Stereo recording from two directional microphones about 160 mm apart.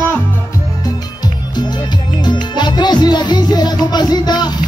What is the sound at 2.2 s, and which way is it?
Music, 30° left (ahead or behind).